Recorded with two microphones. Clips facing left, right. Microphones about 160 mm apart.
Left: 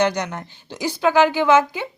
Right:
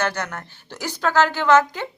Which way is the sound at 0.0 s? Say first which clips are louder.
Left 5 dB; 15° left (ahead or behind).